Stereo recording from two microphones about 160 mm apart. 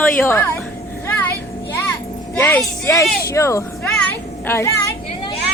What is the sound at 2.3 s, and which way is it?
Speech, 10° left (ahead or behind).